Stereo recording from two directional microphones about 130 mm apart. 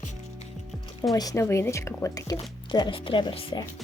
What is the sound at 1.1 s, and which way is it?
Speech, 25° left (ahead or behind).